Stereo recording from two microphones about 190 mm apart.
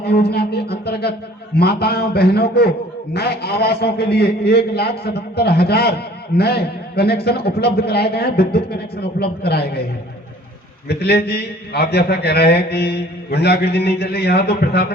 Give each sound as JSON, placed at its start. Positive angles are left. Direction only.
{"t": 0.0, "sound": "a sound", "side_deg": 55}
{"t": 1.5, "sound": "a man's voice", "side_deg": 55}
{"t": 10.8, "sound": "a man's voice", "side_deg": 55}